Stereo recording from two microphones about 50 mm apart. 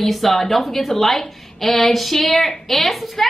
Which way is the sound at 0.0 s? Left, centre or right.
Centre.